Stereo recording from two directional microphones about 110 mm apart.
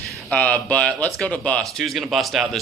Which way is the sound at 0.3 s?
10° left (ahead or behind).